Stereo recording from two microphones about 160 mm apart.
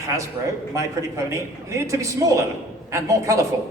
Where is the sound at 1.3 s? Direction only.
20° right (ahead or behind).